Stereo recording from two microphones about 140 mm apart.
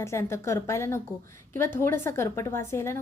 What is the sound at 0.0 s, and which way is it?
A woman's voice, 20° left (ahead or behind).